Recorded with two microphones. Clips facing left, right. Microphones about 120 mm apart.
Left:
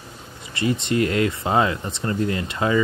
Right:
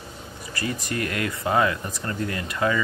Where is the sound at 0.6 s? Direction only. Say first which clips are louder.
Left 7 dB; 25° left (ahead or behind).